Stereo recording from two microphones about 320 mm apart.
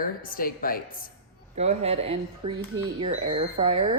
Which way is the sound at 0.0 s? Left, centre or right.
Left.